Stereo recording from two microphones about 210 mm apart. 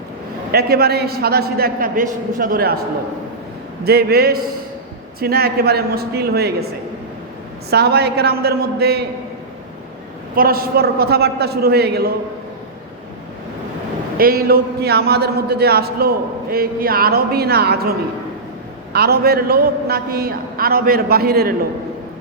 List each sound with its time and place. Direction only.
0.5 s a man's voice: 50° right (ahead or behind)
3.8 s a man's voice: 50° right (ahead or behind)
7.7 s a man's voice: 50° right (ahead or behind)
10.3 s a man's voice: 45° right (ahead or behind)
14.2 s a man's voice: 45° right (ahead or behind)
18.9 s a man's voice: 50° right (ahead or behind)